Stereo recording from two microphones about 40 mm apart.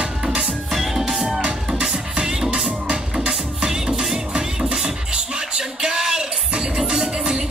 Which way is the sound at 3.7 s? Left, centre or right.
Centre.